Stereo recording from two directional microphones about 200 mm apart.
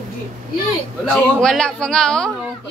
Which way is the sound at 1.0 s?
Centre (ahead or behind).